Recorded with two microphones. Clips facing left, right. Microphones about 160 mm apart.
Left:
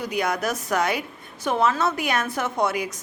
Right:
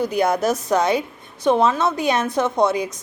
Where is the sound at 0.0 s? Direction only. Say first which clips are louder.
Right 6 dB; 30° right (ahead or behind).